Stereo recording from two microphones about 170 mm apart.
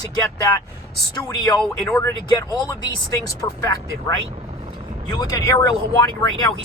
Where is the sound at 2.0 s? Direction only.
20° left (ahead or behind).